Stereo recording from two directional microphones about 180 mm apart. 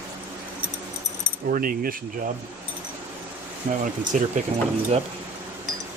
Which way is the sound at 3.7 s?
45° right (ahead or behind).